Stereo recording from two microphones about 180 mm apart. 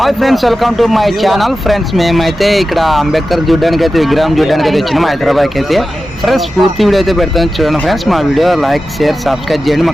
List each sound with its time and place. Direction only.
0.0 s speech: centre (ahead or behind)